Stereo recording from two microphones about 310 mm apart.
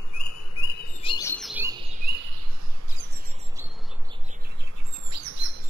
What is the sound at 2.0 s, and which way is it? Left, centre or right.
Bird, right.